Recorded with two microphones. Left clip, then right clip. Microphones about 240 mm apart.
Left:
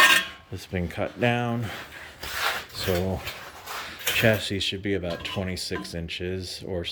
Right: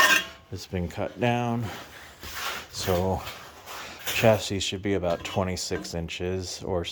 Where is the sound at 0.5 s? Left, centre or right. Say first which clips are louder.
Even; centre.